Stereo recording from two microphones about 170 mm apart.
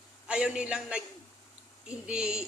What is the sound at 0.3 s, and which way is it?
Speech, 5° right (ahead or behind).